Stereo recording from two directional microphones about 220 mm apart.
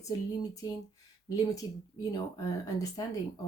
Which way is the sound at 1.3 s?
15° left (ahead or behind).